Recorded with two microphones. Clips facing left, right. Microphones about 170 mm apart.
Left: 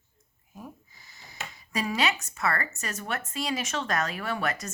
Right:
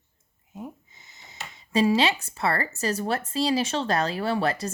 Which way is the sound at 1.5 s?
25° right (ahead or behind).